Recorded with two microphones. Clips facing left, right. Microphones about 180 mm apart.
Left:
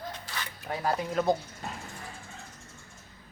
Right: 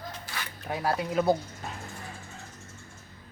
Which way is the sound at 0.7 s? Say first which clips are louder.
Right 1 dB; 5° right (ahead or behind).